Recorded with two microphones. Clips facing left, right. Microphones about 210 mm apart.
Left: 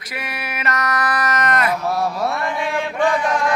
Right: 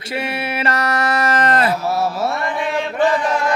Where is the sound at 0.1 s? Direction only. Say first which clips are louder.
Right 7 dB; 30° right (ahead or behind).